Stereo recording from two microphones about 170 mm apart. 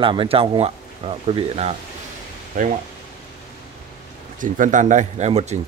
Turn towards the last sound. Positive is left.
turn(degrees=-40)  # may be behind; listen again after turning